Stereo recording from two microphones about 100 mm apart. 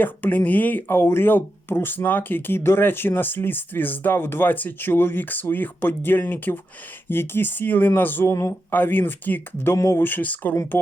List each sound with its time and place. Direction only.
0.0 s speech: 20° left (ahead or behind)
8.7 s speech: 20° left (ahead or behind)
9.6 s speech: 30° left (ahead or behind)